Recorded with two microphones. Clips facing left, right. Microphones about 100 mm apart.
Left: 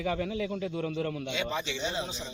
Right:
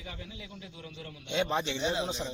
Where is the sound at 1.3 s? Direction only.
50° right (ahead or behind).